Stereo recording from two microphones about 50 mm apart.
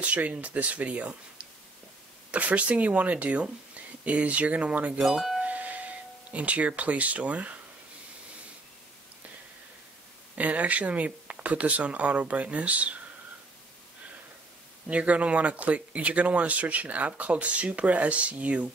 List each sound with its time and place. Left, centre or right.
0.0 s speech: right
5.0 s speech: centre
5.4 s a sound: right
6.3 s speech: right
10.3 s speech: right
14.9 s speech: right